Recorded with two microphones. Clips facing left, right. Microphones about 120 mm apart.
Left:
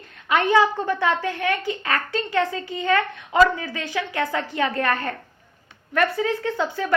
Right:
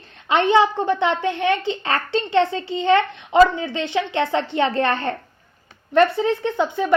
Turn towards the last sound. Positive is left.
turn(degrees=-20)  # may be behind; listen again after turning